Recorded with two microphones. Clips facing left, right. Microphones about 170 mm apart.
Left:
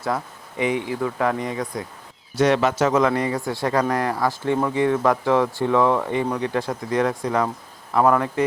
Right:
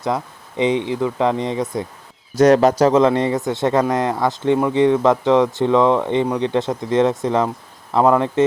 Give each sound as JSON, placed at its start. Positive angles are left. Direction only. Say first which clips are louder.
{"t": 0.0, "sound": "speech", "louder": "right 3 dB", "side_deg": -20}
{"t": 2.3, "sound": "speech", "louder": "right 6 dB", "side_deg": -40}